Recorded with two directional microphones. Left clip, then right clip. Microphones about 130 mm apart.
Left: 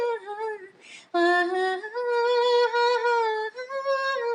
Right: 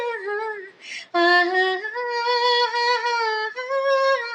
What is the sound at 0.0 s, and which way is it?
Female singing, 55° left (ahead or behind).